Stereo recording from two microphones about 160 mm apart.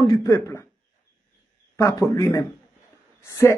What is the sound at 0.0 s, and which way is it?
Speech, 20° left (ahead or behind).